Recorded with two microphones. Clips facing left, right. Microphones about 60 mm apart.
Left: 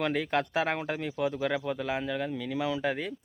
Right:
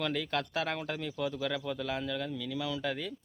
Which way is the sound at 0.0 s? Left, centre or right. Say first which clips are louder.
Left 5 dB; left.